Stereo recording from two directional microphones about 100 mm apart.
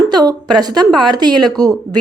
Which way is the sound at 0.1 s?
45° right (ahead or behind).